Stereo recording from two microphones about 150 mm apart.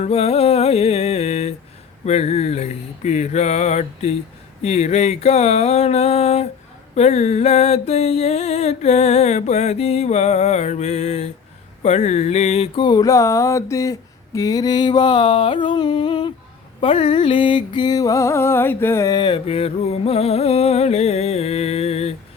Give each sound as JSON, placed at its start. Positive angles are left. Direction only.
{"t": 0.0, "sound": "music", "side_deg": 45}
{"t": 2.0, "sound": "mantra", "side_deg": 45}
{"t": 11.8, "sound": "a sound", "side_deg": 50}
{"t": 14.3, "sound": "music", "side_deg": 25}